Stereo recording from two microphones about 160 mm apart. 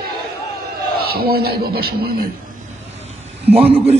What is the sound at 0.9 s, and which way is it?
Speech, 75° right (ahead or behind).